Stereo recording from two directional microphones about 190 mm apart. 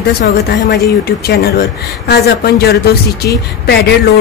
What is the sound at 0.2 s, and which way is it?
Speech, 60° left (ahead or behind).